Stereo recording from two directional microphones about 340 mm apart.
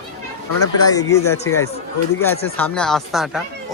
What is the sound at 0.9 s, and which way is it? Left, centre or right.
Speech, centre.